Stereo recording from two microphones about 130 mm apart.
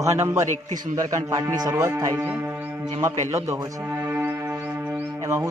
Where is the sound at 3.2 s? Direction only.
20° right (ahead or behind).